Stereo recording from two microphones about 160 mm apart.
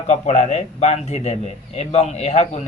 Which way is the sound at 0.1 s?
45° left (ahead or behind).